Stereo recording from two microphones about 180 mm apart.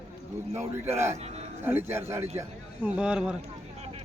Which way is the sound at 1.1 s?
35° right (ahead or behind).